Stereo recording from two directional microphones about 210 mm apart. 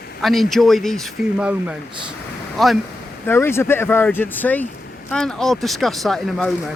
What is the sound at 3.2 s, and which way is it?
Speech, 10° left (ahead or behind).